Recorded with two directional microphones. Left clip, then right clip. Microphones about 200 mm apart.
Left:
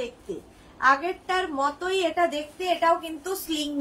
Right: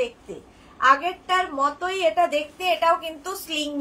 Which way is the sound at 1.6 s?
15° right (ahead or behind).